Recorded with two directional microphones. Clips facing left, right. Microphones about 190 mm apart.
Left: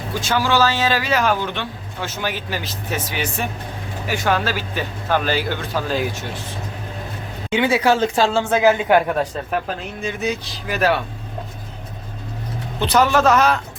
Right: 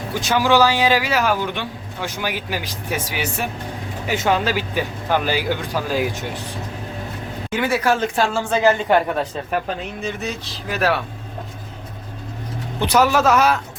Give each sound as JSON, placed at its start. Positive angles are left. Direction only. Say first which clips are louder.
{"t": 0.1, "sound": "speech", "louder": "right 2 dB", "side_deg": -15}
{"t": 4.0, "sound": "speech", "louder": "right 1 dB", "side_deg": -20}
{"t": 7.5, "sound": "speech", "louder": "left 3 dB", "side_deg": 25}
{"t": 8.4, "sound": "speech", "louder": "right 1 dB", "side_deg": 10}
{"t": 12.8, "sound": "speech", "louder": "even", "side_deg": -10}